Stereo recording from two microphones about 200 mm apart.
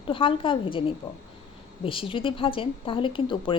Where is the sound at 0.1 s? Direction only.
25° left (ahead or behind).